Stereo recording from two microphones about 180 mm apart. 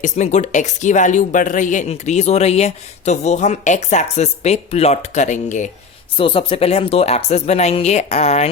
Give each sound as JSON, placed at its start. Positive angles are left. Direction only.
{"t": 0.0, "sound": "a woman's voice", "side_deg": 40}
{"t": 6.1, "sound": "a woman's voice", "side_deg": 30}